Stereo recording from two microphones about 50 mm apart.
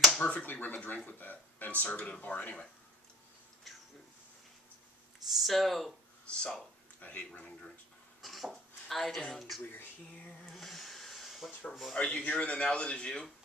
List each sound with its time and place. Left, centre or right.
0.0 s finger snapping: centre
0.3 s speech: left
5.3 s speech: centre
6.2 s speech: centre
7.0 s speech: left
8.2 s dishes: centre
10.5 s a sound: centre
11.9 s speech: centre